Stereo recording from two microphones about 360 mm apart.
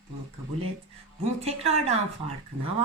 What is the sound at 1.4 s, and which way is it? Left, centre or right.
Speech, centre.